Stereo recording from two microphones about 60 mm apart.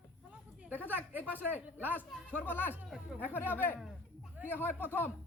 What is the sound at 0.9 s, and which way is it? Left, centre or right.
Speech, right.